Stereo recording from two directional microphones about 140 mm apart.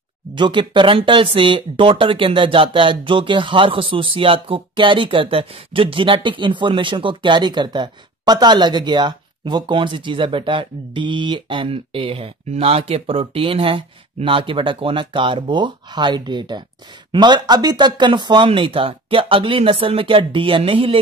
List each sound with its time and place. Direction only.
0.3 s speech: 35° right (ahead or behind)